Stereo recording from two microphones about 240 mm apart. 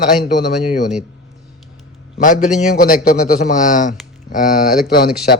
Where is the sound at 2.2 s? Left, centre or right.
Left.